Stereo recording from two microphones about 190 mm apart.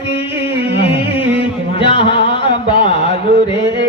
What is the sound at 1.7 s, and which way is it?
Music, 30° left (ahead or behind).